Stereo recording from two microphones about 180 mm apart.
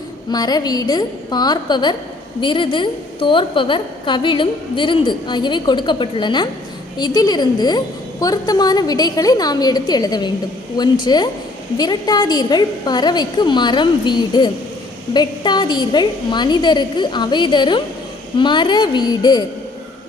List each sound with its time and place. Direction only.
0.3 s a woman's voice: 20° left (ahead or behind)